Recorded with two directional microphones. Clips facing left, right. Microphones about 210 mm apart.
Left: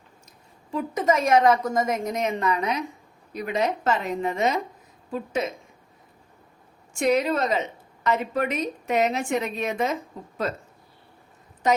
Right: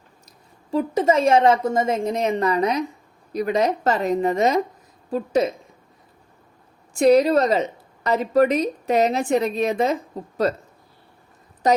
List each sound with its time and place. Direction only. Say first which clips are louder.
0.3 s a woman's voice: right 7 dB; 35° right (ahead or behind)
6.9 s a woman's voice: right 7 dB; 35° right (ahead or behind)
11.6 s a woman's voice: right 4 dB; 35° right (ahead or behind)